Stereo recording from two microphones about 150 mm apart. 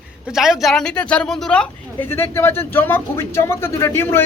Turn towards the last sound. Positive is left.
turn(degrees=15)  # may be behind; listen again after turning